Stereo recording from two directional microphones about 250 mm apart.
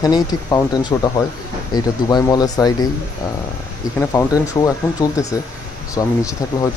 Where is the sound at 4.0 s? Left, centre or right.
Centre.